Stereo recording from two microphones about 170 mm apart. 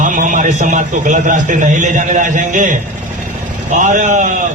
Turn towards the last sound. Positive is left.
turn(degrees=-50)  # may be behind; listen again after turning